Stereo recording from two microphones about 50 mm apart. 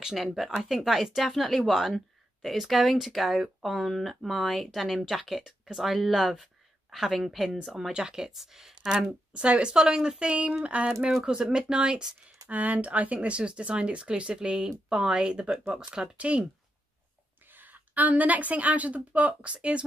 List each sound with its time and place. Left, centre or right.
0.0 s speech: centre
9.3 s speech: right
12.4 s speech: right
17.5 s a woman's voice: right